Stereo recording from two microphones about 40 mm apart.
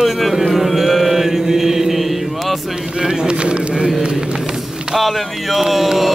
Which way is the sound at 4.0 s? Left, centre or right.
Right.